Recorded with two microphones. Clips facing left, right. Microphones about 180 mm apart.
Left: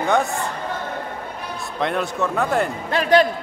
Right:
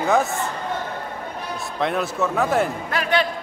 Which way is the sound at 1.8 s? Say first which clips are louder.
Even; centre (ahead or behind).